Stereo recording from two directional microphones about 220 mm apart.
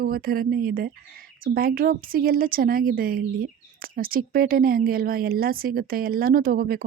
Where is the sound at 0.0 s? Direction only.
40° right (ahead or behind).